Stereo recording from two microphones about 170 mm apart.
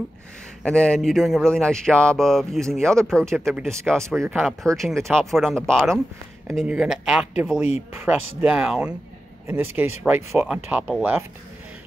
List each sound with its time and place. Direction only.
0.7 s speech: 5° left (ahead or behind)